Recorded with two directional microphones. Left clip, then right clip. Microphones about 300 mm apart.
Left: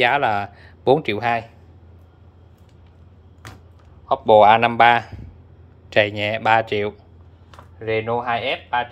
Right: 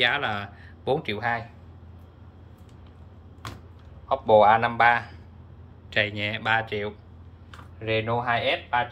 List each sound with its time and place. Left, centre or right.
0.0 s speech: centre
4.1 s speech: left